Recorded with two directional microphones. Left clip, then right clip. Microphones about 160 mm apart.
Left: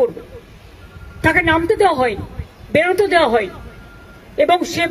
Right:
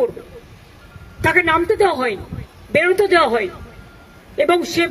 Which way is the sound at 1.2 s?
30° right (ahead or behind).